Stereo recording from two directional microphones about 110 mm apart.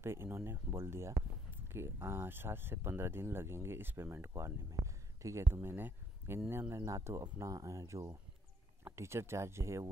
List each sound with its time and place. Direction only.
0.0 s speech: 25° right (ahead or behind)